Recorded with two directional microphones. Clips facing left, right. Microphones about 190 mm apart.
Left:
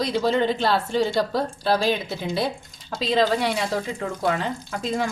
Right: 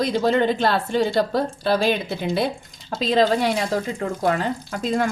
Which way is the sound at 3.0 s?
45° right (ahead or behind).